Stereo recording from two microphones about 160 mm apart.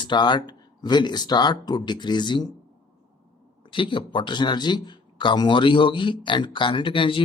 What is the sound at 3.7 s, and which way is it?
Speech, 30° left (ahead or behind).